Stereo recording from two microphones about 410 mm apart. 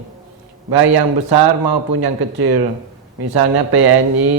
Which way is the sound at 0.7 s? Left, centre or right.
Right.